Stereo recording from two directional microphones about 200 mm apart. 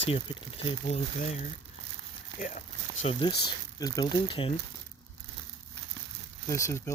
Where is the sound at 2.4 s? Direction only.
35° left (ahead or behind).